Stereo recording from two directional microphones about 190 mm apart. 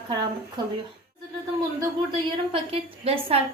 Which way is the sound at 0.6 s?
25° right (ahead or behind).